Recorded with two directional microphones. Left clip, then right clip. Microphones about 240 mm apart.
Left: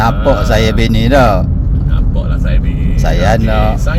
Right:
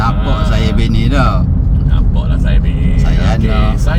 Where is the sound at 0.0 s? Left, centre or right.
Left.